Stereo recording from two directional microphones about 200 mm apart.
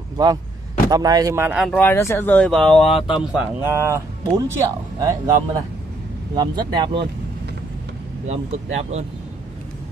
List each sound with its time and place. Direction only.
0.2 s speech: 20° right (ahead or behind)
1.6 s speech: 10° left (ahead or behind)
2.9 s speech: 30° left (ahead or behind)
3.2 s speech: 10° right (ahead or behind)
8.3 s speech: 35° right (ahead or behind)